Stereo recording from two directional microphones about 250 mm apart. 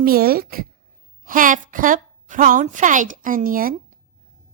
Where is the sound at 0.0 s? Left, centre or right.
Right.